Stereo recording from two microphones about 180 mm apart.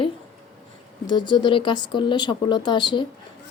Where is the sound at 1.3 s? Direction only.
25° left (ahead or behind).